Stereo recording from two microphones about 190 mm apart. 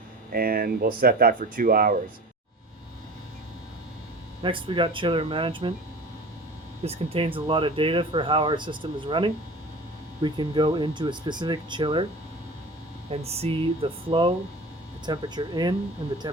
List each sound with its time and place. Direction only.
0.3 s speech: 50° right (ahead or behind)
4.4 s speech: 25° right (ahead or behind)
6.8 s speech: 30° right (ahead or behind)
13.1 s speech: 30° right (ahead or behind)